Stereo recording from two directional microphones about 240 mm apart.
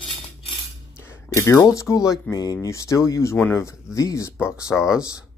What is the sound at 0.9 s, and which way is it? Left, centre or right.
Speech, centre.